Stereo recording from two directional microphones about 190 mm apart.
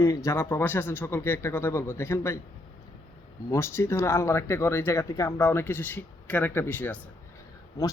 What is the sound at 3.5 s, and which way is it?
Speech, 15° left (ahead or behind).